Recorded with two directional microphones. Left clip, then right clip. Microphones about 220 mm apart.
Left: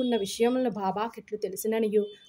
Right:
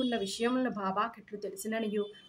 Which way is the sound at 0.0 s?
40° left (ahead or behind).